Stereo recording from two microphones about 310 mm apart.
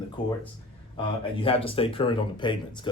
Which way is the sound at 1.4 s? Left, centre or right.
Centre.